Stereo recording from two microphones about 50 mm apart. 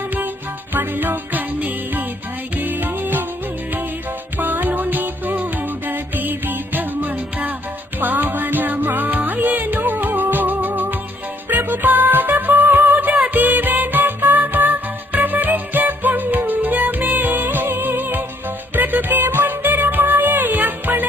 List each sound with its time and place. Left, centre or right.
0.7 s music: right
4.4 s music: right